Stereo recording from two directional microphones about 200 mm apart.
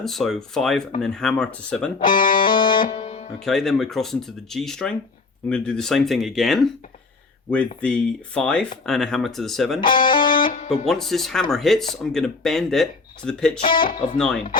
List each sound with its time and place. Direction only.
0.0 s speech: centre (ahead or behind)
2.0 s speech: 45° left (ahead or behind)
2.4 s music: 25° left (ahead or behind)
3.4 s speech: centre (ahead or behind)
9.9 s speech: 25° left (ahead or behind)
10.7 s speech: centre (ahead or behind)